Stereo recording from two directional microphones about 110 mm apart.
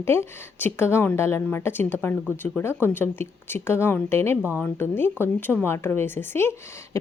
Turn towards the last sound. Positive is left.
turn(degrees=20)  # may be behind; listen again after turning